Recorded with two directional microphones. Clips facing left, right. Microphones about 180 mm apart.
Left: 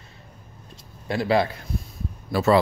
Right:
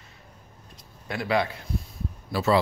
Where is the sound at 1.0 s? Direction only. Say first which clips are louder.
Left 4 dB; 30° left (ahead or behind).